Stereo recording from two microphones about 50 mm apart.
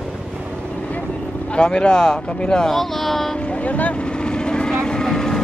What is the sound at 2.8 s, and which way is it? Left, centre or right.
Speech, centre.